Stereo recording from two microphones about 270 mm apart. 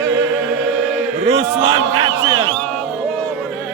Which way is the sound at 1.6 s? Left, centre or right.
Centre.